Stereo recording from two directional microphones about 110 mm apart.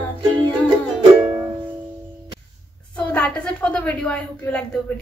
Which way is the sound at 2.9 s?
10° left (ahead or behind).